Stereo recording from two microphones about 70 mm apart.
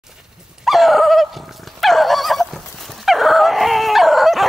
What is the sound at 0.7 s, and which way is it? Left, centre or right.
Dog, centre.